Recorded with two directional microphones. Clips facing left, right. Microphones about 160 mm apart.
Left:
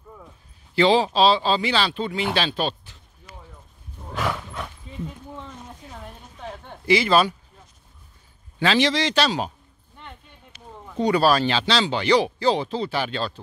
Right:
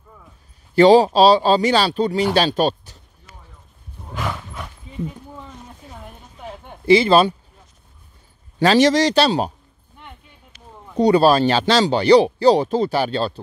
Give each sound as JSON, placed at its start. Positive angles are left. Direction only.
{"t": 0.7, "sound": "speech", "side_deg": -40}
{"t": 4.1, "sound": "roar", "side_deg": 0}
{"t": 5.3, "sound": "a sound", "side_deg": -5}
{"t": 6.9, "sound": "speech", "side_deg": -30}
{"t": 8.5, "sound": "speech", "side_deg": -40}
{"t": 11.0, "sound": "speech", "side_deg": -30}
{"t": 11.4, "sound": "speech", "side_deg": -45}